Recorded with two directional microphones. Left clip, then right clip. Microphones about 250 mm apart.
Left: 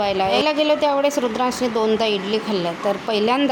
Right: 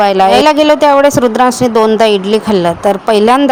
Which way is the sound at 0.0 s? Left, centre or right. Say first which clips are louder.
Right 12 dB; right.